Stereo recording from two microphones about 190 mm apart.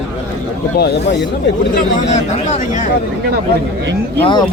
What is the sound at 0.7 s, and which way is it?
Speech, 60° left (ahead or behind).